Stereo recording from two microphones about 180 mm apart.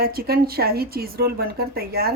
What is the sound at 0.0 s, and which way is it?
Speech, 60° right (ahead or behind).